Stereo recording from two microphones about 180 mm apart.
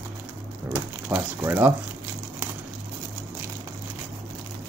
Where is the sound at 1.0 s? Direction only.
10° right (ahead or behind).